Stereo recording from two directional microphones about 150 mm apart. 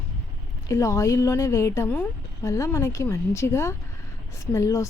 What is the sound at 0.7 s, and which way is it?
A woman's voice, 20° left (ahead or behind).